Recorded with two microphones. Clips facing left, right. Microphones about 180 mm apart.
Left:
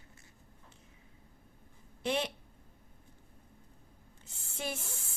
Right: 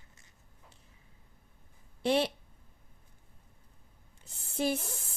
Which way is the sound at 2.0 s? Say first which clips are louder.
Right 5 dB; 35° right (ahead or behind).